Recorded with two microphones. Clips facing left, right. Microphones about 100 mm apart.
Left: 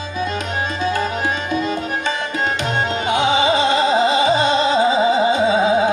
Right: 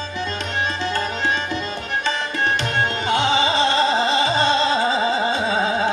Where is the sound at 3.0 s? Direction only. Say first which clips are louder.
Left 3 dB; 15° left (ahead or behind).